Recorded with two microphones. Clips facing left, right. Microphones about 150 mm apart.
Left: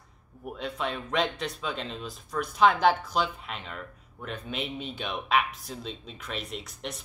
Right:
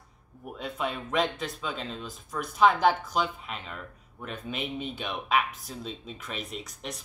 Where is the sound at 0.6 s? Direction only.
5° right (ahead or behind).